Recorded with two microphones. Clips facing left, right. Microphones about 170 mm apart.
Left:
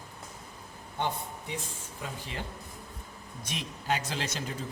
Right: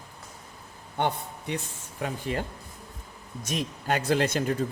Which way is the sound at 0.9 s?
65° right (ahead or behind).